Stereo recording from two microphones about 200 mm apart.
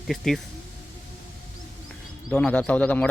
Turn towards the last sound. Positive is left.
turn(degrees=5)  # may be behind; listen again after turning